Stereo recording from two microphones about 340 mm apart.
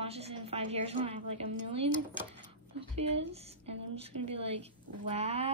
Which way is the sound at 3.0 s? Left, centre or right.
Centre.